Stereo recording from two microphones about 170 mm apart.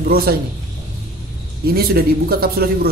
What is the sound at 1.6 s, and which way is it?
Speech, 65° right (ahead or behind).